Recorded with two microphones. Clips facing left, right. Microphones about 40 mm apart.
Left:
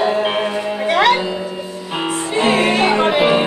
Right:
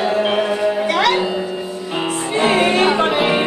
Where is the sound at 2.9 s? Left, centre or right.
Centre.